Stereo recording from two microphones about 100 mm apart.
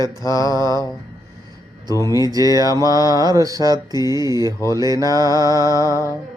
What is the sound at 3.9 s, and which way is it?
Mantra, 40° left (ahead or behind).